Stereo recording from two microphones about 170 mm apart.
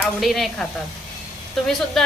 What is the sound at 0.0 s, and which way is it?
A woman's voice, centre (ahead or behind).